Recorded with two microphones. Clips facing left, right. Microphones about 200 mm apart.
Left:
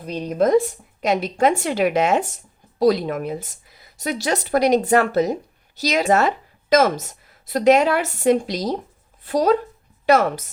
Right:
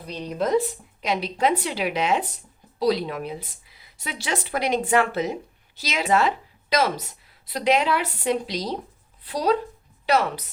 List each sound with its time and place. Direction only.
0.1 s speech: 50° left (ahead or behind)